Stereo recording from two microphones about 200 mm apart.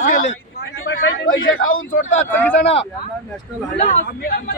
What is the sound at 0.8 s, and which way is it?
A man's voice, 80° left.